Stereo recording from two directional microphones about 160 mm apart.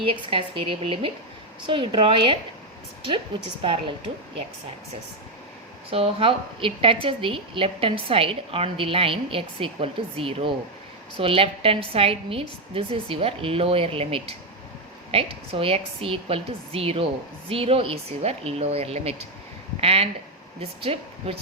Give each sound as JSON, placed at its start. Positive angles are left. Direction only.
{"t": 0.0, "sound": "a woman's voice", "side_deg": -35}
{"t": 3.6, "sound": "a woman's voice", "side_deg": -35}
{"t": 5.9, "sound": "a woman's voice", "side_deg": -35}